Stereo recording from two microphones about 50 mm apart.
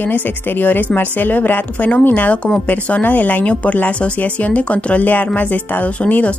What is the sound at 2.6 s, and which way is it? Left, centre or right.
A woman's voice, left.